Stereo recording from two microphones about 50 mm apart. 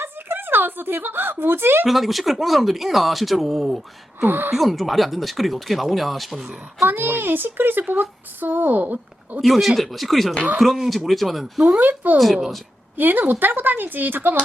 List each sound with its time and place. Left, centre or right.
0.0 s a woman's voice: right
1.9 s speech: centre
4.2 s a child's voice: right
4.5 s speech: centre
6.8 s a child's voice: right
9.4 s speech: centre
11.6 s speech: right
12.1 s speech: centre
13.0 s speech: right